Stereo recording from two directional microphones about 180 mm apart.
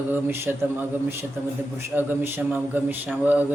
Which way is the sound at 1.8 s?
15° right (ahead or behind).